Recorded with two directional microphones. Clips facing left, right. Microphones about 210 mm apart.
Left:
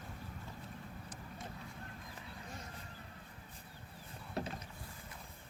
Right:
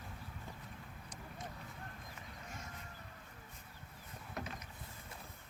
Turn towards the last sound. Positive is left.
turn(degrees=30)  # may be behind; listen again after turning